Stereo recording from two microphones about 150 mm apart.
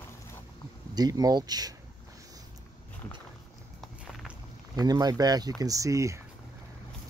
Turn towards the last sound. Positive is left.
turn(degrees=-20)  # may be behind; listen again after turning